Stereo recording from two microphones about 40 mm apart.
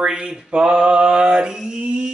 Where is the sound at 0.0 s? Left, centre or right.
Right.